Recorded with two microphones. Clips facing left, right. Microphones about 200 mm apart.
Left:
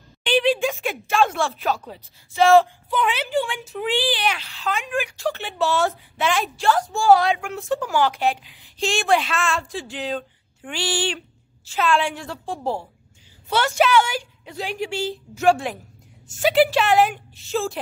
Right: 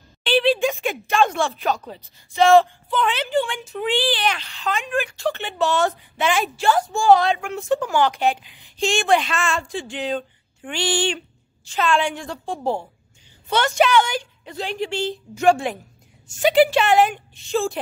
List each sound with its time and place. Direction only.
0.2 s a sound: 15° left (ahead or behind)
0.7 s a woman's voice: centre (ahead or behind)
4.0 s speech: 10° left (ahead or behind)
5.2 s a woman's voice: centre (ahead or behind)